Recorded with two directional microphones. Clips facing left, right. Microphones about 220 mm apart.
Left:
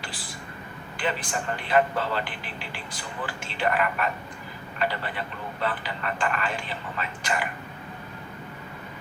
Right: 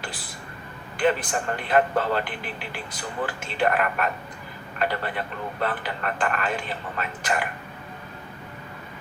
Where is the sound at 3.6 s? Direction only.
50° right (ahead or behind).